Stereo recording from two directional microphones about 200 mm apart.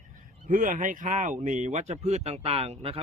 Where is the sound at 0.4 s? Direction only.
40° right (ahead or behind).